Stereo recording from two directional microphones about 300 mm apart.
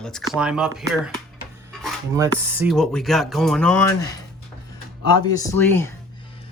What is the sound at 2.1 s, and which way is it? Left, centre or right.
Speech, centre.